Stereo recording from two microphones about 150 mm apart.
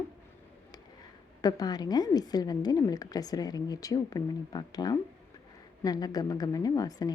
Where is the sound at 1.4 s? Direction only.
25° left (ahead or behind).